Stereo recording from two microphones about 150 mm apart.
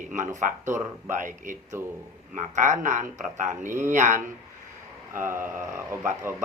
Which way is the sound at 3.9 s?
55° right (ahead or behind).